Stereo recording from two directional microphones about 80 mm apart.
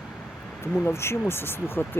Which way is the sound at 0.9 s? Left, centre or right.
Left.